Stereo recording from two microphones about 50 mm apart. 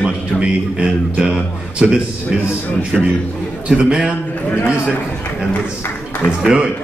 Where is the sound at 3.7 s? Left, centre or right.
Centre.